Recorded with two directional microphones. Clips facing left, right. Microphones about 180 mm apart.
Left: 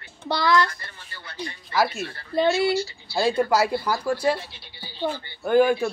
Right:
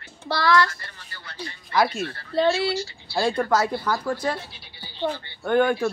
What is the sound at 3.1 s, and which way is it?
Speech, 5° left (ahead or behind).